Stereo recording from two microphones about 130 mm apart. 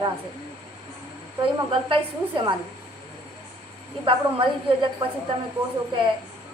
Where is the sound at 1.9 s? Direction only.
40° right (ahead or behind).